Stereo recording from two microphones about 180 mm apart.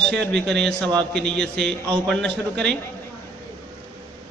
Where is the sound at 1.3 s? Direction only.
70° right (ahead or behind).